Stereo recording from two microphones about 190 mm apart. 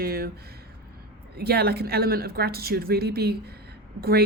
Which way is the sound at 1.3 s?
55° right (ahead or behind).